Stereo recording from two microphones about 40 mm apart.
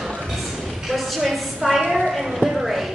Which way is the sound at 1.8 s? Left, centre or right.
Centre.